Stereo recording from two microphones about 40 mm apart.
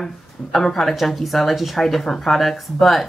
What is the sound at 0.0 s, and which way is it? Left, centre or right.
A woman's voice, centre.